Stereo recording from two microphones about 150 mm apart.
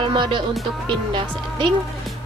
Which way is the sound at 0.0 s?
30° right (ahead or behind).